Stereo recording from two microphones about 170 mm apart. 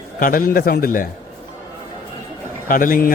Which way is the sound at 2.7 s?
55° left (ahead or behind).